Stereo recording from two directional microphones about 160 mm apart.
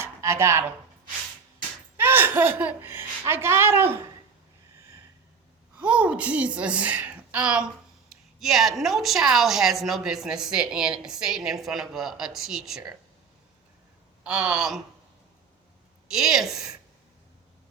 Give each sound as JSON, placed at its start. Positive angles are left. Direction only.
{"t": 0.0, "sound": "a sound", "side_deg": -15}
{"t": 2.0, "sound": "speech", "side_deg": -10}
{"t": 5.7, "sound": "a woman's voice", "side_deg": -10}
{"t": 14.3, "sound": "a woman's voice", "side_deg": -5}
{"t": 16.0, "sound": "a woman's voice", "side_deg": -5}